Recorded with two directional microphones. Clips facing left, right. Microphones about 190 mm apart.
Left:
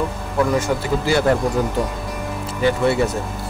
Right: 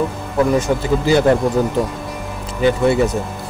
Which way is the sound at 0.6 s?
20° right (ahead or behind).